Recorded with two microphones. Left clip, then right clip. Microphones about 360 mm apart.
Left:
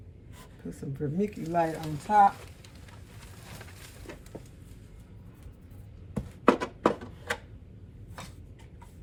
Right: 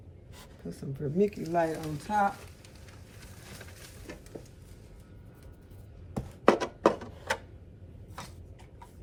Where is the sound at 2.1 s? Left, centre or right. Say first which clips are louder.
Left 7 dB; centre.